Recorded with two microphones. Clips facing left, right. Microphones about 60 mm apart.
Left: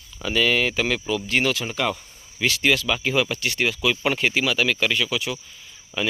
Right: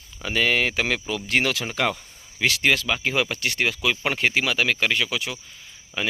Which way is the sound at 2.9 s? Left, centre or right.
Right.